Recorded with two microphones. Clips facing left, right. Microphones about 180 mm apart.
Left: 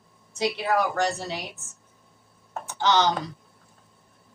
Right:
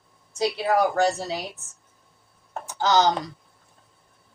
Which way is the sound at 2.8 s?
40° right (ahead or behind).